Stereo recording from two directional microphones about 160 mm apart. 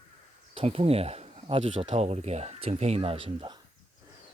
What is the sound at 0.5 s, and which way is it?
Speech, 35° right (ahead or behind).